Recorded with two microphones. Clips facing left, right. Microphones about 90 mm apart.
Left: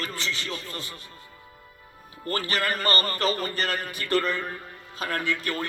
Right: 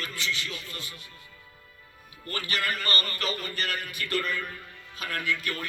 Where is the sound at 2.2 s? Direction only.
35° left (ahead or behind).